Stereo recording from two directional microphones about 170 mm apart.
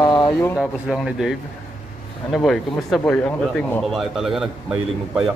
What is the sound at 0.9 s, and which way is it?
Speech, 5° right (ahead or behind).